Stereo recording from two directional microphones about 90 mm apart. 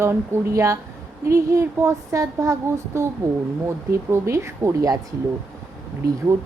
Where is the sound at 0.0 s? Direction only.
30° right (ahead or behind).